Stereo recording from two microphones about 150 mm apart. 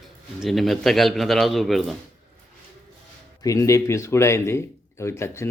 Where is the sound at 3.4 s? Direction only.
20° left (ahead or behind).